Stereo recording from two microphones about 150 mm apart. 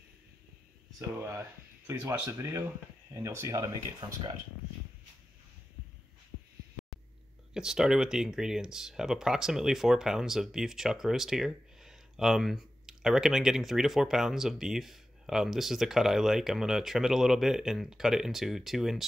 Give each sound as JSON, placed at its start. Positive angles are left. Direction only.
{"t": 0.9, "sound": "speech", "side_deg": -20}
{"t": 7.5, "sound": "speech", "side_deg": -5}